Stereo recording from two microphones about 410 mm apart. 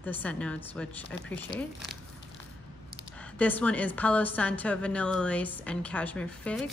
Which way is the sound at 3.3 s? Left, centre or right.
Centre.